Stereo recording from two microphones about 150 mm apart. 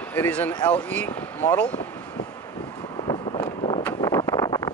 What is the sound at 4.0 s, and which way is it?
Vehicle, 20° left (ahead or behind).